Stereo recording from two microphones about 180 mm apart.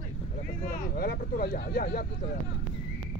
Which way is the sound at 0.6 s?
60° left (ahead or behind).